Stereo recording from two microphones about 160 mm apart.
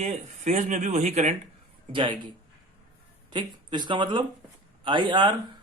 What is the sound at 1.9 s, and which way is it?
Speech, 30° right (ahead or behind).